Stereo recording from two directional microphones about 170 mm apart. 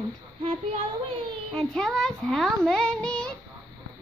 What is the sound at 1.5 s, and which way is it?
A child's voice, 5° left (ahead or behind).